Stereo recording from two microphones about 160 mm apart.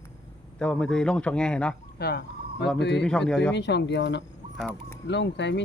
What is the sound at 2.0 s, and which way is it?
Speech, 85° left.